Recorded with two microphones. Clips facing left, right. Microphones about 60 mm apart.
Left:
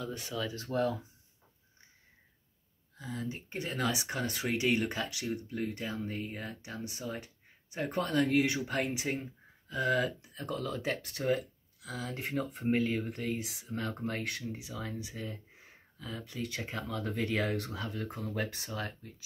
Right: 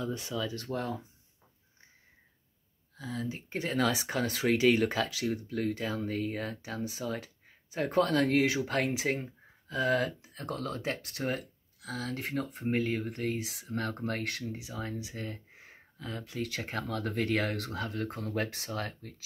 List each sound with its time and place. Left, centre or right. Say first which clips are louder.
0.7 s speech: left 5 dB; right
3.0 s speech: right 2 dB; right
12.3 s speech: left 1 dB; right
13.0 s speech: right 2 dB; right